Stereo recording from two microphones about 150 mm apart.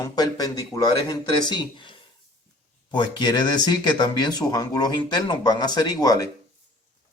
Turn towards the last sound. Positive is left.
turn(degrees=25)  # may be behind; listen again after turning